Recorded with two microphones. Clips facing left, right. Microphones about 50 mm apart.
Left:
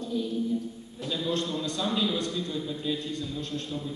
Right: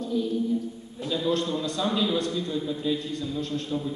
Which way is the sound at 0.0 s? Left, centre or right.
Centre.